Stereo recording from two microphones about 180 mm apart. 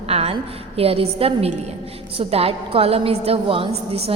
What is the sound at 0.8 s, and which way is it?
A woman's voice, 30° right (ahead or behind).